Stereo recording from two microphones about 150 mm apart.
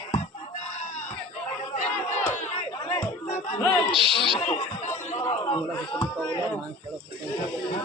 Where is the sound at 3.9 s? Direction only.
35° right (ahead or behind).